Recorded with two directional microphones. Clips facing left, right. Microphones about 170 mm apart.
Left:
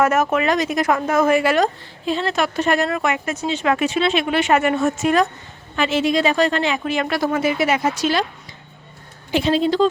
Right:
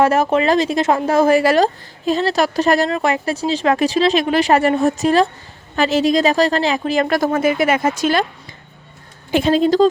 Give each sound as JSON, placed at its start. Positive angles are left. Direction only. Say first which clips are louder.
{"t": 0.0, "sound": "speech", "louder": "right 3 dB", "side_deg": -30}
{"t": 9.3, "sound": "speech", "louder": "right 4 dB", "side_deg": -50}